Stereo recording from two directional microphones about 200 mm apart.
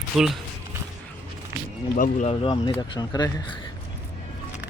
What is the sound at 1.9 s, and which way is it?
Speech, 40° left (ahead or behind).